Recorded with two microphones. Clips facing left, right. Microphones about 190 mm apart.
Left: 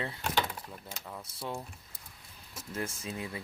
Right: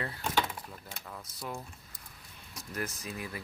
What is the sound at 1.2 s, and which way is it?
Speech, 30° left (ahead or behind).